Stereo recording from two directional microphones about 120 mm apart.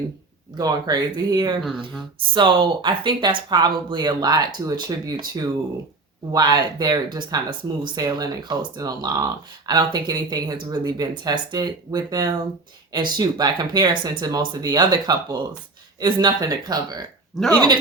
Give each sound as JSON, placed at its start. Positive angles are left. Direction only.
{"t": 0.5, "sound": "speech", "side_deg": -35}